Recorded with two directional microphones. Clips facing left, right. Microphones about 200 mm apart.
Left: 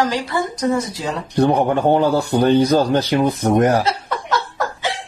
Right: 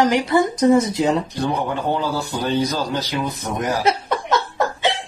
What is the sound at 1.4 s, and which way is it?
A man's voice, 55° left (ahead or behind).